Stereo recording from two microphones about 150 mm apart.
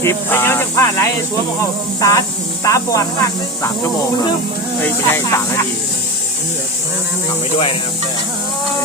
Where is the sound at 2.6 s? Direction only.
20° left (ahead or behind).